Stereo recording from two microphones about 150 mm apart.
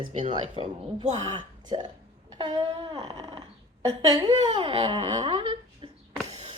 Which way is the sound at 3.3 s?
40° right (ahead or behind).